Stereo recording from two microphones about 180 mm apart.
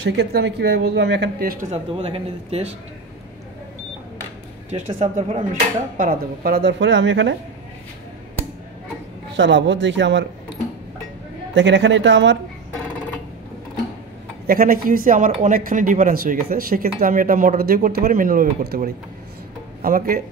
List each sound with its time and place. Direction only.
0.0 s speech: 65° right (ahead or behind)
1.7 s speech: 30° right (ahead or behind)
4.6 s speech: 40° right (ahead or behind); by 7.3 s 90° right
9.4 s speech: 90° right
11.5 s speech: 90° right
14.4 s speech: 55° right (ahead or behind)